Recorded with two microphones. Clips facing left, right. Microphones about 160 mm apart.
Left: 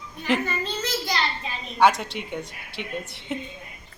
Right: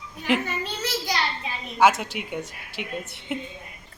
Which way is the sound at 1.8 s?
Centre (ahead or behind).